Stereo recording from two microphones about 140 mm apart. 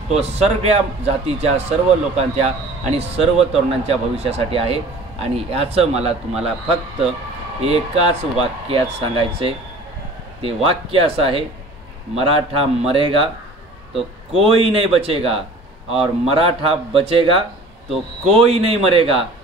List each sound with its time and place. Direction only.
0.1 s a man's voice: 50° right (ahead or behind)
14.3 s a man's voice: 40° right (ahead or behind)
17.8 s speech: centre (ahead or behind)
18.3 s a man's voice: 45° right (ahead or behind)